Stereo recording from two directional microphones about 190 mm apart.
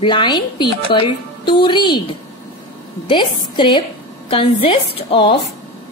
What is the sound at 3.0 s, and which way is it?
A woman's voice, 25° left (ahead or behind).